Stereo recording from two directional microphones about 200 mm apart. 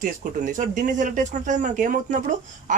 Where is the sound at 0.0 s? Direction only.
40° right (ahead or behind).